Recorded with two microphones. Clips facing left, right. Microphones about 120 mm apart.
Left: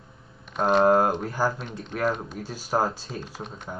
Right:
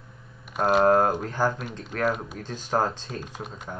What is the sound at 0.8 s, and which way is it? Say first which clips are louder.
Speech: even; 10° left (ahead or behind).